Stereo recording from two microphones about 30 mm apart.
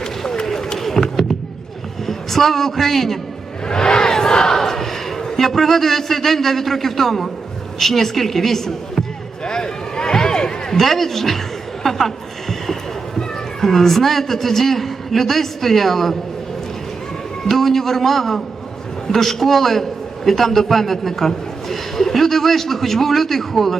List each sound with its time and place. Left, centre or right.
0.8 s a sound: centre
2.0 s a man's voice: centre
3.7 s crowd: left
4.5 s battle cry: centre
5.4 s a man's voice: centre
9.4 s a sound: left
10.8 s a man's voice: centre
11.8 s a sound: centre
13.1 s a man's voice: centre
17.5 s a man's voice: centre